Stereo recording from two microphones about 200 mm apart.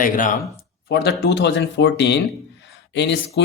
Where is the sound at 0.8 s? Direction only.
55° left (ahead or behind).